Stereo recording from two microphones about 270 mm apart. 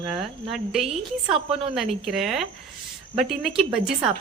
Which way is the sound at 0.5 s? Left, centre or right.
Centre.